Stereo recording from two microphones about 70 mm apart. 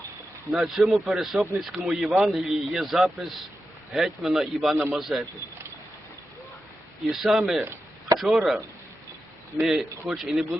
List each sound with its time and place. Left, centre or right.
0.5 s a man's voice: centre
4.7 s a man's voice: right
4.9 s speech: centre
7.1 s a man's voice: centre